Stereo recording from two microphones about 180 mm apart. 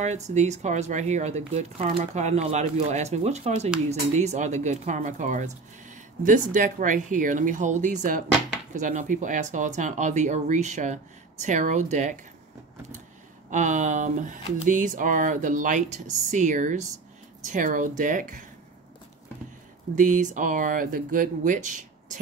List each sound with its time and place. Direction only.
0.0 s speech: 40° right (ahead or behind)
13.5 s speech: 45° right (ahead or behind)
20.0 s speech: 45° right (ahead or behind)